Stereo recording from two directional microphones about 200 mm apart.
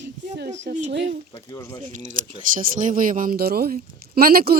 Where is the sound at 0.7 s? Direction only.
35° right (ahead or behind).